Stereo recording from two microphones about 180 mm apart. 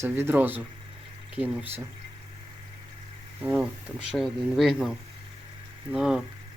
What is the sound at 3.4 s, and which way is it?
Speech, 5° right (ahead or behind).